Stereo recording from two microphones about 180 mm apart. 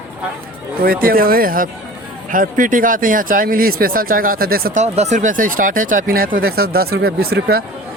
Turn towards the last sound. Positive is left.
turn(degrees=-55)  # may be behind; listen again after turning